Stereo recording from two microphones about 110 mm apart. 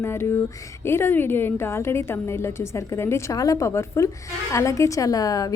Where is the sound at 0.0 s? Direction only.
25° left (ahead or behind).